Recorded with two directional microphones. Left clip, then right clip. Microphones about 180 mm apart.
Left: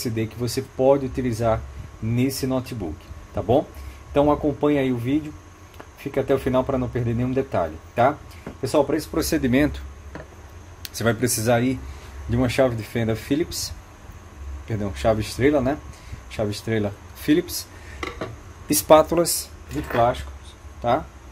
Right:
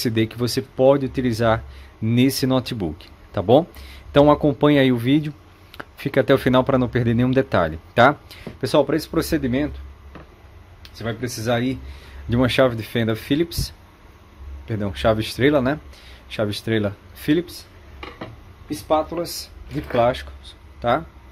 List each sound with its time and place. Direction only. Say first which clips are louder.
0.0 s speech: right 5 dB; 45° right (ahead or behind)
10.8 s a sound: left 6 dB; 35° left (ahead or behind)
11.1 s speech: left 5 dB; 15° left (ahead or behind)
11.5 s speech: even; 20° right (ahead or behind)
12.3 s speech: right 3 dB; 35° right (ahead or behind)
18.7 s speech: left 6 dB; 50° left (ahead or behind)
20.8 s speech: right 1 dB; 35° right (ahead or behind)